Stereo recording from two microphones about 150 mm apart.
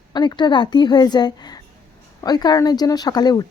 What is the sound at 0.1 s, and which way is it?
Speech, 30° left (ahead or behind).